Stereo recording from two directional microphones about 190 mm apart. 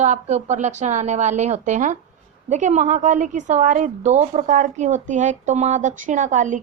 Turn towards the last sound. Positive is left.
turn(degrees=-40)  # may be behind; listen again after turning